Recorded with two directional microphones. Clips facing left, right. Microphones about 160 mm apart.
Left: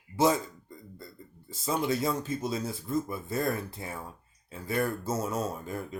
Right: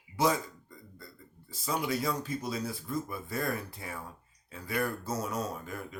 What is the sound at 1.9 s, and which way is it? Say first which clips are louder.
Speech: left 3 dB; 25° left (ahead or behind).